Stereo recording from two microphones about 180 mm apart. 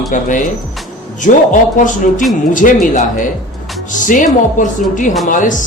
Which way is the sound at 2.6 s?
45° left (ahead or behind).